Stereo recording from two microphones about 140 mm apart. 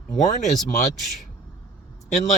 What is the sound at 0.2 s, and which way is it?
Speech, 55° left (ahead or behind).